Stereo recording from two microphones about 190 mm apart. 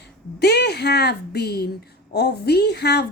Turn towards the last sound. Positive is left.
turn(degrees=60)  # may be behind; listen again after turning